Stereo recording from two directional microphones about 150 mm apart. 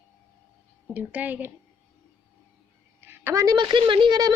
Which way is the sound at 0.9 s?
10° right (ahead or behind).